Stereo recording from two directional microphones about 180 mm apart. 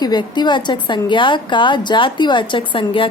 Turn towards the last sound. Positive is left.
turn(degrees=25)  # may be behind; listen again after turning